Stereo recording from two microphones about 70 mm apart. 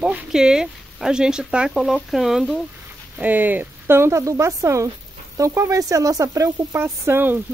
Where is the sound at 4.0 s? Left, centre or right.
Right.